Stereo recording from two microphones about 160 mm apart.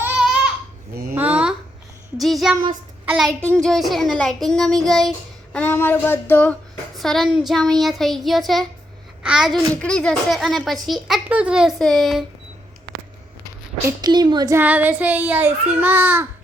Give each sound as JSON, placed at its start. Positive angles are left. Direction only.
{"t": 1.1, "sound": "a sound", "side_deg": -10}
{"t": 2.2, "sound": "speech", "side_deg": 0}
{"t": 14.0, "sound": "a woman's voice", "side_deg": -25}
{"t": 14.6, "sound": "a child's voice", "side_deg": -10}